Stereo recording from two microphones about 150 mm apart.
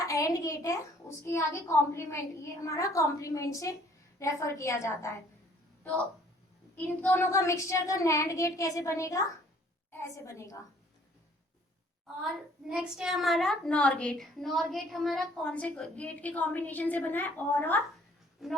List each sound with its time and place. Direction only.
0.0 s a child's voice: 20° left (ahead or behind)
6.7 s a child's voice: 15° left (ahead or behind)
12.2 s a woman's voice: 5° right (ahead or behind); by 17.7 s 10° left (ahead or behind)
18.4 s speech: centre (ahead or behind)